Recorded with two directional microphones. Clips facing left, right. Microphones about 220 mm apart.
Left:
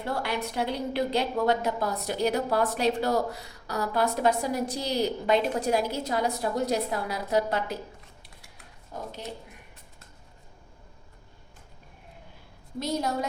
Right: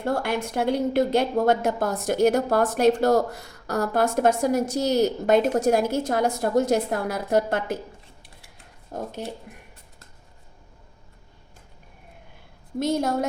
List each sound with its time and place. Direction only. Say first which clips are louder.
0.0 s a woman's voice: right 5 dB; 50° right (ahead or behind)
8.9 s a woman's voice: right 6 dB; 50° right (ahead or behind)
12.8 s a woman's voice: right 6 dB; 50° right (ahead or behind)